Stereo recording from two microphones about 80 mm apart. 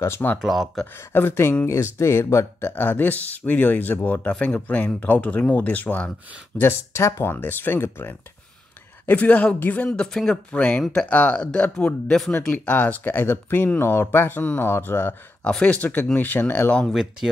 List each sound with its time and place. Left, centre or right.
0.0 s speech: left
0.4 s speech: centre
0.9 s speech: left
6.6 s speech: left; by 9.8 s centre
9.8 s speech: centre
10.8 s speech: centre
11.1 s speech: centre
12.3 s speech: left
15.4 s speech: centre
16.8 s speech: centre